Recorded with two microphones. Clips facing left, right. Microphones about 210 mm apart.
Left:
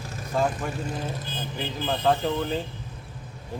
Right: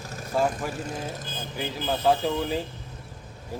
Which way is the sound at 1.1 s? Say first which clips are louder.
Left 1 dB; 45° right (ahead or behind).